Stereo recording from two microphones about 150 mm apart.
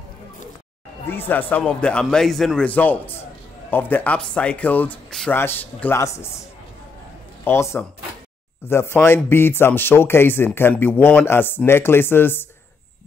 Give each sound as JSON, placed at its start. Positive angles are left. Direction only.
{"t": 1.0, "sound": "speech", "side_deg": 15}
{"t": 7.4, "sound": "speech", "side_deg": 15}